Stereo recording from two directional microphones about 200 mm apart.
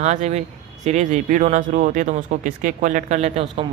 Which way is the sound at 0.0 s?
35° right (ahead or behind).